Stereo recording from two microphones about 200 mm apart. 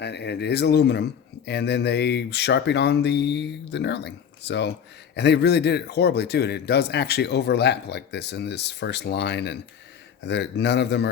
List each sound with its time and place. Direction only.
0.0 s speech: 55° left (ahead or behind)